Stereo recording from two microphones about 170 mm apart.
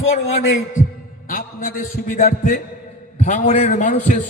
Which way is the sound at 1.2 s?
55° left (ahead or behind).